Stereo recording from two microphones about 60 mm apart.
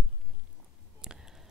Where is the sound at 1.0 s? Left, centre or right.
Centre.